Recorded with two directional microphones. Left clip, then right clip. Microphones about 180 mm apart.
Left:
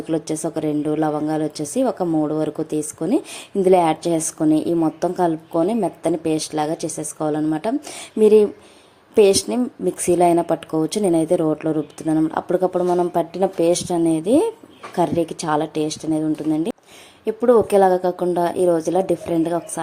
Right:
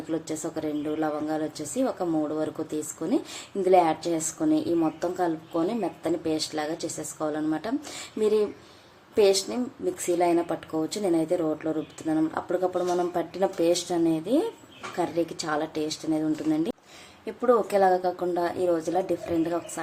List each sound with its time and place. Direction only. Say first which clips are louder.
0.1 s a woman's voice: left 8 dB; 30° left (ahead or behind)
17.2 s speech: left 8 dB; 30° left (ahead or behind)